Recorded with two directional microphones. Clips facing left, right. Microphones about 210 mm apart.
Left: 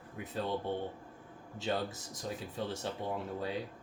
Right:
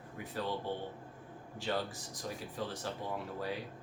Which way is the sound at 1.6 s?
20° left (ahead or behind).